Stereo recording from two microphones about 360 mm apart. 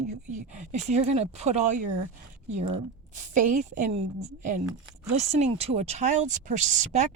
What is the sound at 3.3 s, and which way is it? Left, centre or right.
Speech, right.